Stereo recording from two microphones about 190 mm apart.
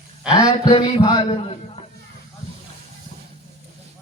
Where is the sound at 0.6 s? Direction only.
30° left (ahead or behind).